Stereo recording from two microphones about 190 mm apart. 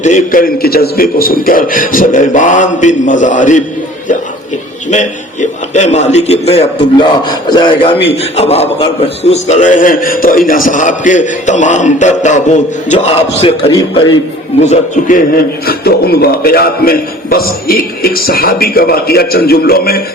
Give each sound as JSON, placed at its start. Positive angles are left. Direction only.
{"t": 0.0, "sound": "a man's voice", "side_deg": 40}
{"t": 4.9, "sound": "a man's voice", "side_deg": 40}
{"t": 14.6, "sound": "a man's voice", "side_deg": 40}
{"t": 15.6, "sound": "a man's voice", "side_deg": 55}